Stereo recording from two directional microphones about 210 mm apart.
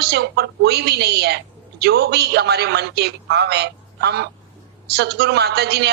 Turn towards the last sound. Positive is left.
turn(degrees=-50)  # may be behind; listen again after turning